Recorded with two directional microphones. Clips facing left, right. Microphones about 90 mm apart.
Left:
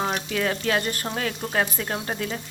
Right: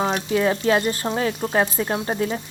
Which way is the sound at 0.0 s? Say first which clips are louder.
Right 5 dB; 25° right (ahead or behind).